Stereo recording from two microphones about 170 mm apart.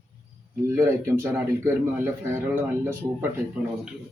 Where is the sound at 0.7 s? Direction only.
15° right (ahead or behind).